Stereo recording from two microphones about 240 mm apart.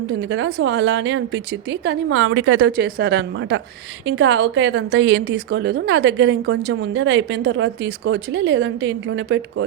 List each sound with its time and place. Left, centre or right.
0.2 s a woman's voice: right
2.7 s a woman's voice: right